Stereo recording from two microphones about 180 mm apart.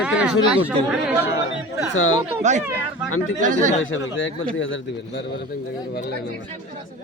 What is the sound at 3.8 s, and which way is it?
A man's voice, 90° left.